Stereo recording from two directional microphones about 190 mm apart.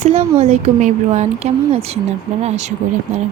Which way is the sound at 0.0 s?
35° right (ahead or behind).